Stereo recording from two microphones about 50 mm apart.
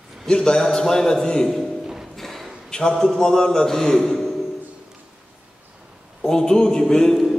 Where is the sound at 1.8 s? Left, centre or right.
Centre.